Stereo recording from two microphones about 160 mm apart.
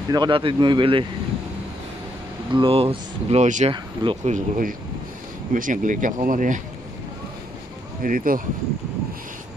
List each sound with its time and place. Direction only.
0.1 s speech: 30° right (ahead or behind)
2.5 s speech: 35° right (ahead or behind)
3.7 s speech: 30° right (ahead or behind)
4.2 s speech: 55° right (ahead or behind)
8.0 s speech: 60° right (ahead or behind)